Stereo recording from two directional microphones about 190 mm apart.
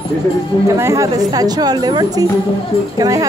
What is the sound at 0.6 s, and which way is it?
A woman's voice, 15° right (ahead or behind).